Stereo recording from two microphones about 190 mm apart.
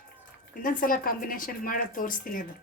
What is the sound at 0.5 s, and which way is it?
Speech, 45° left (ahead or behind).